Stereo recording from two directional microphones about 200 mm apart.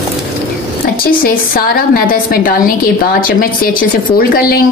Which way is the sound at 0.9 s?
45° left (ahead or behind).